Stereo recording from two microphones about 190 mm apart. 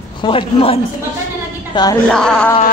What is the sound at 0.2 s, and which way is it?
Speech, 25° left (ahead or behind).